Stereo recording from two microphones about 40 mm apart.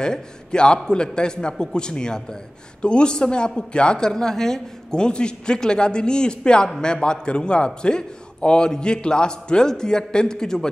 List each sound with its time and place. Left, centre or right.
0.0 s a woman's voice: left